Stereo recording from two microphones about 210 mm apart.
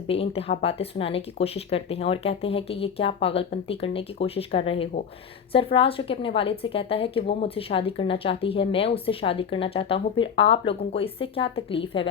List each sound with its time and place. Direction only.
0.1 s a woman's voice: 30° left (ahead or behind)